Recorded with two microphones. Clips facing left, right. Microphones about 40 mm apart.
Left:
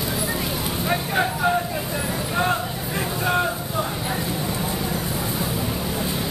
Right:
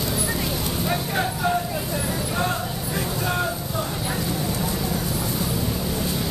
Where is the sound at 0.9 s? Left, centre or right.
Centre.